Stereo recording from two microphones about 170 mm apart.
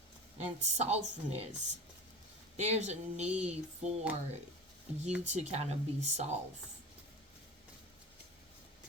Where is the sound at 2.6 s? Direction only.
40° right (ahead or behind).